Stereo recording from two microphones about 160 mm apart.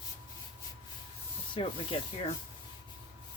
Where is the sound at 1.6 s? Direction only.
35° left (ahead or behind).